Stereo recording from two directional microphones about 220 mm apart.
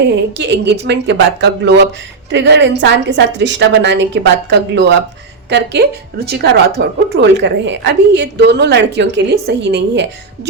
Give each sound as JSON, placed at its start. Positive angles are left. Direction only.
{"t": 0.3, "sound": "a woman's voice", "side_deg": -50}